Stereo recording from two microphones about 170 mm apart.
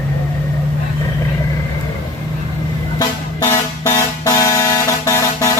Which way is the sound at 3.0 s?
15° left (ahead or behind).